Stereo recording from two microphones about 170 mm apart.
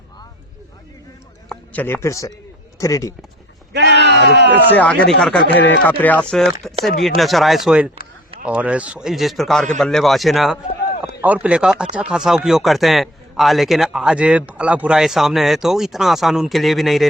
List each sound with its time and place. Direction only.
1.5 s a man's voice: 10° left (ahead or behind)
3.7 s speech: 85° right
4.7 s chopping: 10° left (ahead or behind)
7.0 s a man's voice: centre (ahead or behind)